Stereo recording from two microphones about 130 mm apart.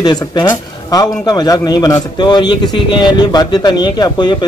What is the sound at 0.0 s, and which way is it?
Speech, 30° left (ahead or behind).